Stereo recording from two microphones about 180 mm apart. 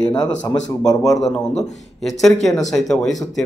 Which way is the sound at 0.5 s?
20° left (ahead or behind).